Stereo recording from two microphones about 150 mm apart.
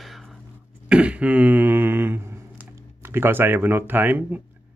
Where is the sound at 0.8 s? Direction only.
10° right (ahead or behind).